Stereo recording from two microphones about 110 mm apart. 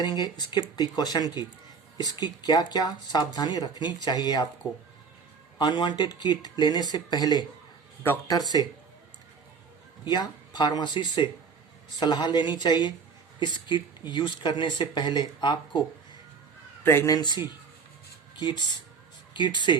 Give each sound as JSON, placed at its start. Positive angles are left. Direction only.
{"t": 0.0, "sound": "speech", "side_deg": 40}
{"t": 5.5, "sound": "speech", "side_deg": 45}
{"t": 10.1, "sound": "speech", "side_deg": 40}
{"t": 16.8, "sound": "speech", "side_deg": 20}
{"t": 17.2, "sound": "speech", "side_deg": 40}